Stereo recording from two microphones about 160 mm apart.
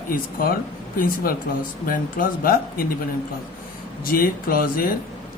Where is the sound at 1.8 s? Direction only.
60° left (ahead or behind).